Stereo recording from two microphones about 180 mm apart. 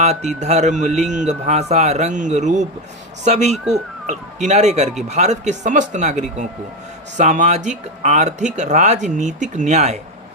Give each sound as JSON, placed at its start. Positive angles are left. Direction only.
{"t": 0.3, "sound": "speech", "side_deg": -40}
{"t": 3.5, "sound": "speech", "side_deg": 0}
{"t": 4.0, "sound": "speech", "side_deg": -40}